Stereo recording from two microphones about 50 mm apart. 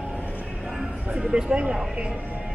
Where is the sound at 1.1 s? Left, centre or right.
Centre.